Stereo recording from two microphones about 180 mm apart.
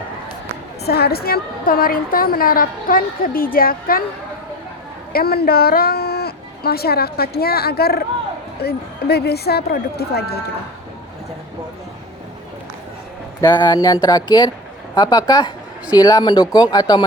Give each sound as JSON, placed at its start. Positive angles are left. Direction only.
{"t": 0.9, "sound": "a woman's voice", "side_deg": 60}
{"t": 5.1, "sound": "a woman's voice", "side_deg": 60}
{"t": 13.4, "sound": "speech", "side_deg": 25}